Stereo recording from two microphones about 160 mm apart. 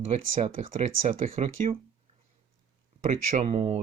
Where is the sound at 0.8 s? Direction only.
50° right (ahead or behind).